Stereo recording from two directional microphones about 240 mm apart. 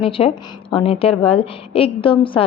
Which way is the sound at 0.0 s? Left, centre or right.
Left.